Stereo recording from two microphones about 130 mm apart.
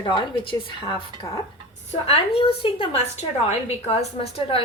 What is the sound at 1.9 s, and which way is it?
A woman's voice, 45° left (ahead or behind).